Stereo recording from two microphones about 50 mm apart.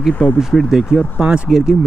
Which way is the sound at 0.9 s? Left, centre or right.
Centre.